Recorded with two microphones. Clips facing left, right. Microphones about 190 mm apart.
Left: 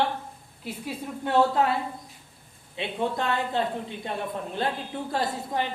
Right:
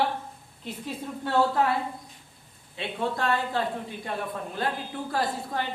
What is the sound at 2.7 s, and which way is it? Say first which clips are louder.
A woman's voice: left 2 dB; 20° left (ahead or behind).